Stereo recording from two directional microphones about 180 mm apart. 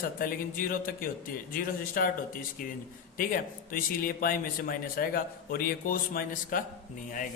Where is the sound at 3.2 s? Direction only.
50° left (ahead or behind).